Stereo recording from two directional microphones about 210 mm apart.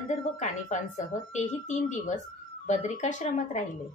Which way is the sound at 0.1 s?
35° left (ahead or behind).